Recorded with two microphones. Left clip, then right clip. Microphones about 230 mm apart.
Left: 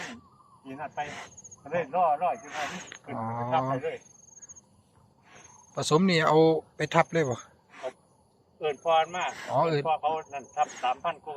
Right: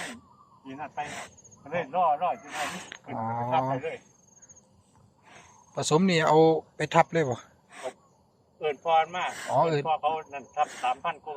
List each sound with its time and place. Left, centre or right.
0.6 s speech: centre
1.0 s speech: right
1.6 s speech: centre
2.5 s speech: right
3.1 s speech: centre
5.7 s speech: centre
7.7 s a sound: right
8.6 s speech: centre
9.8 s speech: centre